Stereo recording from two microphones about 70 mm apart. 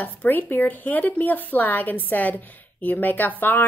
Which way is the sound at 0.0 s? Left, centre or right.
Left.